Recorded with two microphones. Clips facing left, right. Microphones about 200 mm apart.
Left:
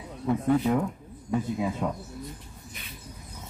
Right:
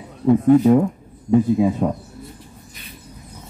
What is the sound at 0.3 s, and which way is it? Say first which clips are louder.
A man's voice: right 11 dB; 40° right (ahead or behind).